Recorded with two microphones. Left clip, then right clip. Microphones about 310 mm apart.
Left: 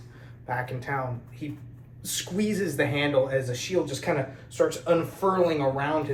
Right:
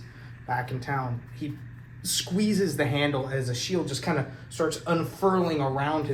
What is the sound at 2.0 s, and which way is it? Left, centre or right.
Speech, right.